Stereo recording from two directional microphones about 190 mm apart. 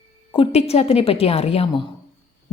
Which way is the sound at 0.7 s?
35° left (ahead or behind).